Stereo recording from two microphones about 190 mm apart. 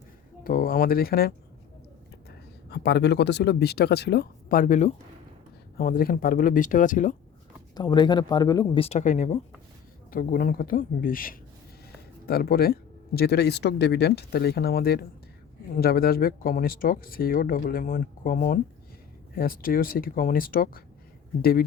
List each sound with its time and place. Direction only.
0.4 s speech: 50° left (ahead or behind)
2.6 s speech: 60° left (ahead or behind); by 7.2 s 40° left (ahead or behind)
7.8 s speech: 20° left (ahead or behind); by 9.4 s 35° left (ahead or behind)
10.1 s speech: 45° left (ahead or behind)